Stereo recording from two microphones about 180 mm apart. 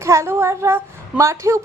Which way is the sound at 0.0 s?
15° right (ahead or behind).